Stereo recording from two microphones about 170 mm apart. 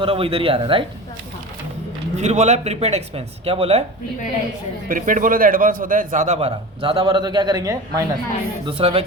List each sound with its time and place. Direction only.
0.0 s speech: 35° right (ahead or behind)
2.1 s speech: 40° right (ahead or behind)
4.9 s a man's voice: 50° right (ahead or behind); by 8.0 s 20° right (ahead or behind)
8.6 s speech: 35° right (ahead or behind)